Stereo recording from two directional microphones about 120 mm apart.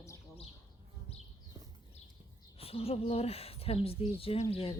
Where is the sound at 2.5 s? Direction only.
55° left (ahead or behind).